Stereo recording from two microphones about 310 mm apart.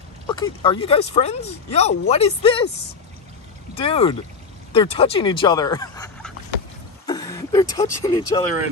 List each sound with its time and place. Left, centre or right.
0.3 s speech: centre
3.7 s speech: centre